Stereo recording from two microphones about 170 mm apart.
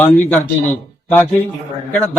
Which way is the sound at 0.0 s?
10° left (ahead or behind).